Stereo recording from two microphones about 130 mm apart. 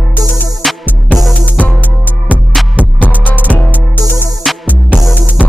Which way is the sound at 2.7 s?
10° right (ahead or behind).